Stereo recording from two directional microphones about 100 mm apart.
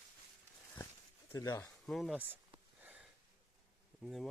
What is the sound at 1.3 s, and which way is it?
Speech, 35° left (ahead or behind).